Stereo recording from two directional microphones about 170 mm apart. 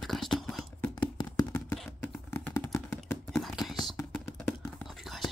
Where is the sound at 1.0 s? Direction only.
25° left (ahead or behind).